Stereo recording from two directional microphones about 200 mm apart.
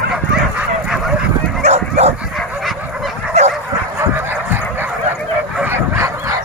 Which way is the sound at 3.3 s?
35° right (ahead or behind).